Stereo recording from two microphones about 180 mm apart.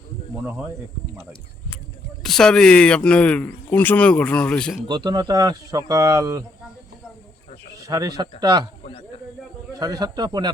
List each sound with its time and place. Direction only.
2.2 s speech: 5° left (ahead or behind)
4.9 s speech: 25° right (ahead or behind)
7.8 s speech: 20° right (ahead or behind)
8.8 s snake: 35° left (ahead or behind)
9.7 s speech: 20° right (ahead or behind)